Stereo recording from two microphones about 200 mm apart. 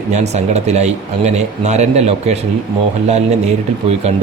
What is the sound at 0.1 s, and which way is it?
Speech, 35° right (ahead or behind).